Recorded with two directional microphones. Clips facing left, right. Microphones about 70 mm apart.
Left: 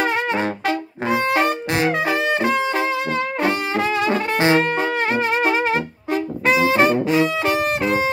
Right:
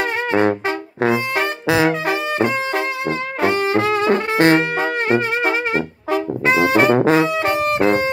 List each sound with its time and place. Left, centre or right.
3.4 s music: right
6.4 s brass instrument: right
6.7 s music: right